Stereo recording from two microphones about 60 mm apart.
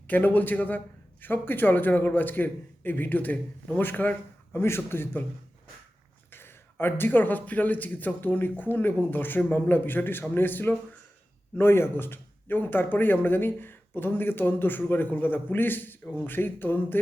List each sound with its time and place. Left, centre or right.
0.1 s a man's voice: left
4.5 s a man's voice: left
6.3 s a man's voice: left